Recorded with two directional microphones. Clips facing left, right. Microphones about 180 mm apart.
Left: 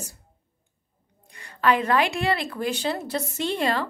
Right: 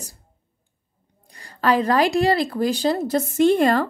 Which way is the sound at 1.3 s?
35° right (ahead or behind).